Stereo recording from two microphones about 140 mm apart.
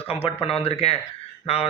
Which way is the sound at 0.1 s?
45° left (ahead or behind).